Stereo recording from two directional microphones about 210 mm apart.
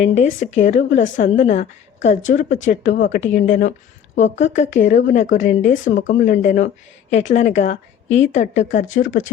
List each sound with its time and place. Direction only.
0.0 s a woman's voice: 35° left (ahead or behind)